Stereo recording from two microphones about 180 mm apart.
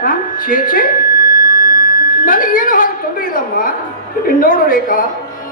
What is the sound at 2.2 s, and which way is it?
A woman's voice, 50° left (ahead or behind).